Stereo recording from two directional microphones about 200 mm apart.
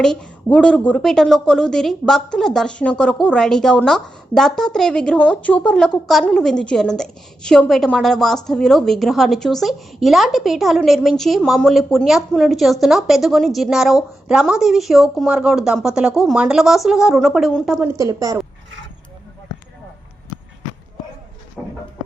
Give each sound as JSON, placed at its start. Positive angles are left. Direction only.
{"t": 0.0, "sound": "a woman's voice", "side_deg": 5}
{"t": 17.8, "sound": "a woman's voice", "side_deg": -15}
{"t": 21.6, "sound": "a sound", "side_deg": 0}